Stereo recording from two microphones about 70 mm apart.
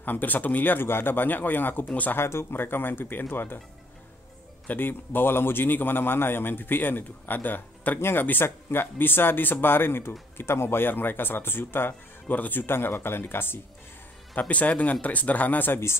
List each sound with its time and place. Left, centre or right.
0.0 s a man's voice: left
2.1 s speech: left
4.6 s a man's voice: left
14.5 s a man's voice: left